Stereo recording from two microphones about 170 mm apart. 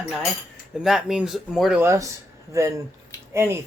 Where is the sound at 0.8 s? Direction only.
5° right (ahead or behind).